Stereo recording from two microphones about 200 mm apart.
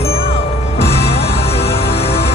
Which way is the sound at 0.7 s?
30° left (ahead or behind).